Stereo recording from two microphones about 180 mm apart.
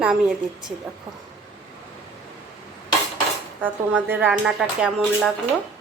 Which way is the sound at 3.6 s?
10° right (ahead or behind).